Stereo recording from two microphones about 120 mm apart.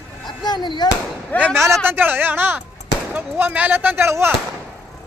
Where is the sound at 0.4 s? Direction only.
35° left (ahead or behind).